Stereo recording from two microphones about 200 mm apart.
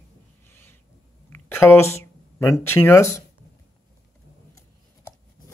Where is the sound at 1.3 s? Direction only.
10° left (ahead or behind).